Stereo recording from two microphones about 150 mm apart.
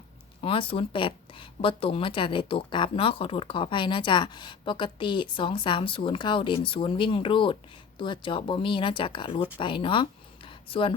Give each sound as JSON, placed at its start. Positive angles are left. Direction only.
{"t": 0.4, "sound": "speech", "side_deg": 35}